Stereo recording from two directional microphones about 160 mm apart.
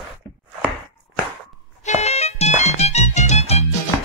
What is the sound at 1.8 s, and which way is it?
Music, 45° left (ahead or behind).